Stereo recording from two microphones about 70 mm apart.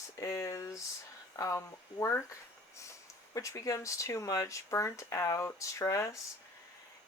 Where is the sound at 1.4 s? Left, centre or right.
Left.